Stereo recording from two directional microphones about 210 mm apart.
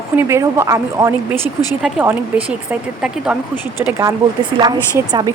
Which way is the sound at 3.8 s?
15° right (ahead or behind).